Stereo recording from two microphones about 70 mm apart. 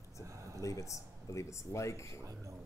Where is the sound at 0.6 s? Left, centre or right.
Left.